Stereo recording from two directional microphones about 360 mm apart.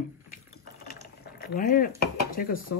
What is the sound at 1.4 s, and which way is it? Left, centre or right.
Speech, left.